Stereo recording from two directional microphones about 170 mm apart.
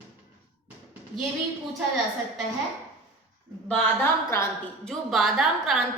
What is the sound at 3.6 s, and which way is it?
Speech, 5° left (ahead or behind).